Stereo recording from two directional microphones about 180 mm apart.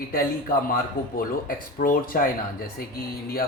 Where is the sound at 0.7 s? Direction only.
50° left (ahead or behind).